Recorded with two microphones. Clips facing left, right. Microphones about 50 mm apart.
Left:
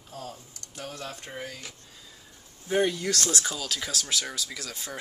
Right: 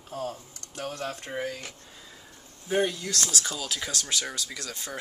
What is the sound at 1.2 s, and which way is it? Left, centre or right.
Speech, centre.